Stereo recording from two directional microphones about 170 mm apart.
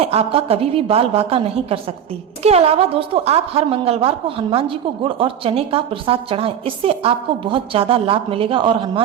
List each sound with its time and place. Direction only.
0.0 s a woman's voice: 35° right (ahead or behind)